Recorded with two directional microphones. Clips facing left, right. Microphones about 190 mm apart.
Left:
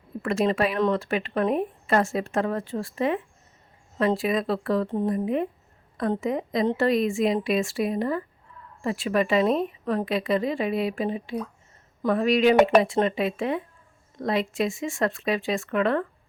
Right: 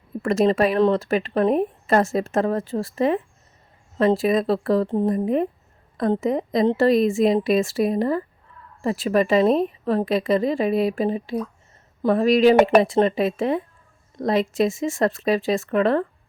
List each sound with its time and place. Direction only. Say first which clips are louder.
0.2 s speech: right 5 dB; 40° right (ahead or behind)